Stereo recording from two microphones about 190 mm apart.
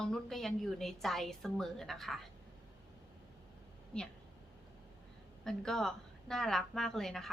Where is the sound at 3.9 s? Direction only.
5° left (ahead or behind).